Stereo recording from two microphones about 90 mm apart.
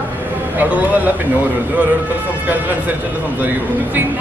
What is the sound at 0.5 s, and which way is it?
Speech, 20° right (ahead or behind).